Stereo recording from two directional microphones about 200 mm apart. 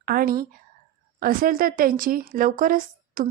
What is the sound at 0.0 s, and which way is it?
A woman's voice, 50° right (ahead or behind).